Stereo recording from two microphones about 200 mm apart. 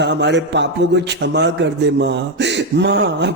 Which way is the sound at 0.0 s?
60° right (ahead or behind).